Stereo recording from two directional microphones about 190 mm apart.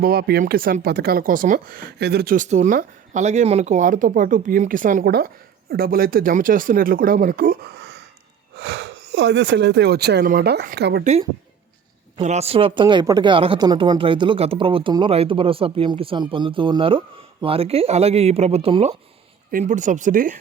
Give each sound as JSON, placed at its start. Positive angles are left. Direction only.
{"t": 0.0, "sound": "speech", "side_deg": -55}
{"t": 12.2, "sound": "speech", "side_deg": -35}
{"t": 19.5, "sound": "speech", "side_deg": -45}